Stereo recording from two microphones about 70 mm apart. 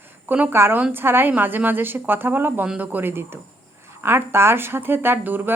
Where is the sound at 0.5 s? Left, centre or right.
Right.